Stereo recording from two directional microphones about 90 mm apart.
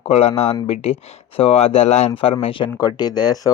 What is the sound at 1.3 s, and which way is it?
Speech, 90° left.